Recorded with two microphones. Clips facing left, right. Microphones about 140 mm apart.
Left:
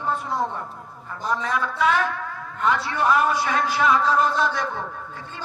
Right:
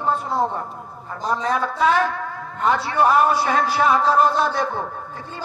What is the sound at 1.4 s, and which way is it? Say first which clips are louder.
Speech: right 4 dB; 35° right (ahead or behind).